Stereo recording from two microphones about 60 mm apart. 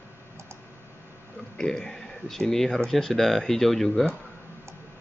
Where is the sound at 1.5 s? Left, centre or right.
Centre.